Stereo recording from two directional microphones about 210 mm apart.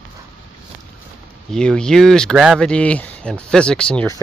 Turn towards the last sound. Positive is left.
turn(degrees=5)  # may be behind; listen again after turning